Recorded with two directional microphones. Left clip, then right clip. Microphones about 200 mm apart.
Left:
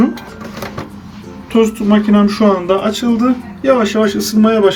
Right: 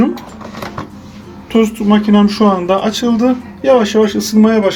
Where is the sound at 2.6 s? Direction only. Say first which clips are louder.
Right 1 dB; 30° right (ahead or behind).